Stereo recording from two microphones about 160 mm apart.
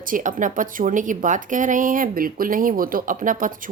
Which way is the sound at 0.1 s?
55° right (ahead or behind).